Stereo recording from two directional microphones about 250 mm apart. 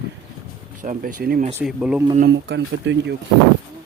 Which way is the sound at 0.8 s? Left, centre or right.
Right.